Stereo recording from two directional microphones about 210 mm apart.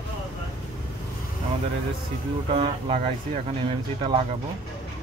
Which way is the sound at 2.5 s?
30° right (ahead or behind).